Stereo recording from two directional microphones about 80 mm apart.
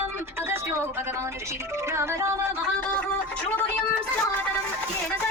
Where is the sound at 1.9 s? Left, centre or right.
Right.